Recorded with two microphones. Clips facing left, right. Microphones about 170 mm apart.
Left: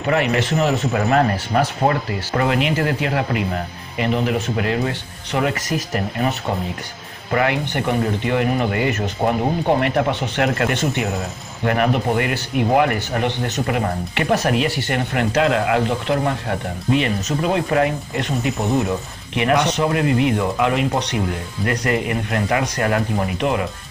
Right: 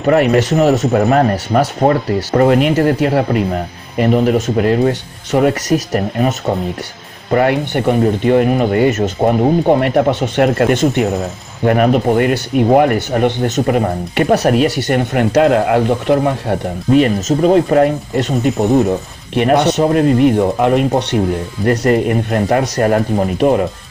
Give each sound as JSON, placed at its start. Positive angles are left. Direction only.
{"t": 0.0, "sound": "speech", "side_deg": -40}